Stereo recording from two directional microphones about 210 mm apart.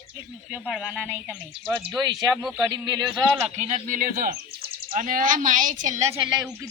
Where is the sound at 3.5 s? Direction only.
30° right (ahead or behind).